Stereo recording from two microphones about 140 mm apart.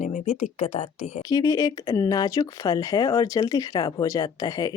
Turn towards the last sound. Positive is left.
turn(degrees=25)  # may be behind; listen again after turning